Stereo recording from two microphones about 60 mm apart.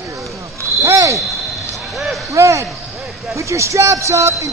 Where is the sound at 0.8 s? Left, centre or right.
Right.